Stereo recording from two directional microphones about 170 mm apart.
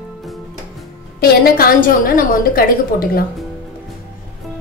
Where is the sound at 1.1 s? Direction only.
60° left (ahead or behind).